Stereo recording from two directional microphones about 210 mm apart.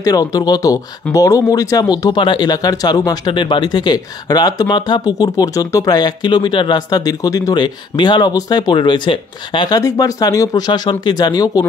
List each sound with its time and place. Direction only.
0.0 s speech: 15° left (ahead or behind)